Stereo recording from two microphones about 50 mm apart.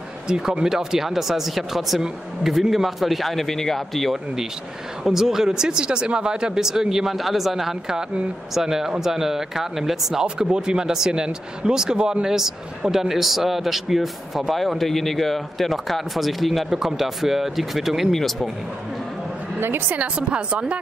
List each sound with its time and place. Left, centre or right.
0.3 s speech: centre
5.0 s speech: centre
10.2 s speech: centre
19.9 s speech: right